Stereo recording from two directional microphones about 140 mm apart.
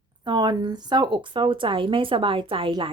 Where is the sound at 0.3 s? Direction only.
30° right (ahead or behind).